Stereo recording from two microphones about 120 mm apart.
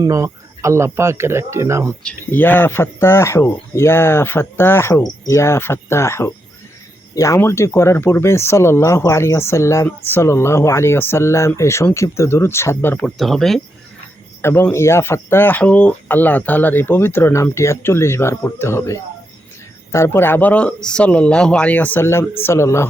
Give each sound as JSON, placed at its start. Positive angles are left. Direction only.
{"t": 0.0, "sound": "speech", "side_deg": -25}
{"t": 2.0, "sound": "speech", "side_deg": 15}
{"t": 13.1, "sound": "speech", "side_deg": 0}
{"t": 14.4, "sound": "speech", "side_deg": 20}